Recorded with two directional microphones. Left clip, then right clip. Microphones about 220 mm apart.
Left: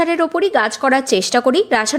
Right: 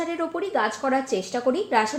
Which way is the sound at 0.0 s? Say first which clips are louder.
Left 12 dB; 35° left (ahead or behind).